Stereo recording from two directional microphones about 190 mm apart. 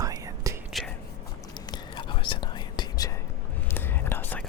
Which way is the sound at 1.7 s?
25° left (ahead or behind).